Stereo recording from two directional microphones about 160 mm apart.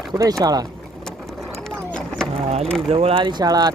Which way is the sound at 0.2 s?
25° right (ahead or behind).